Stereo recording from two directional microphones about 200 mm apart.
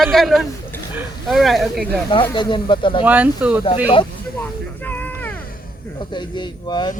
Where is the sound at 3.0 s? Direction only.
10° right (ahead or behind).